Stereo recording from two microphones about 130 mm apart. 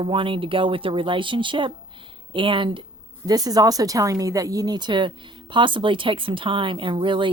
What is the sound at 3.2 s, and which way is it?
Speech, 30° right (ahead or behind).